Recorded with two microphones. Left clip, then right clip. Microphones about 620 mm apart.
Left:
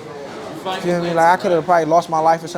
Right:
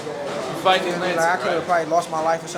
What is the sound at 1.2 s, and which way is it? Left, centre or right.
A man's voice, left.